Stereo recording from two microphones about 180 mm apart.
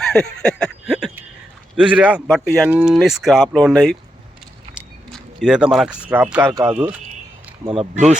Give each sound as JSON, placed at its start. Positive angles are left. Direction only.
{"t": 0.0, "sound": "a sound", "side_deg": 5}
{"t": 1.7, "sound": "speech", "side_deg": -5}
{"t": 5.1, "sound": "speech", "side_deg": -5}
{"t": 7.6, "sound": "speech", "side_deg": -30}